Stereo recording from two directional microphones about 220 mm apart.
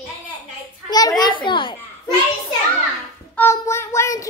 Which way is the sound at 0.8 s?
20° left (ahead or behind).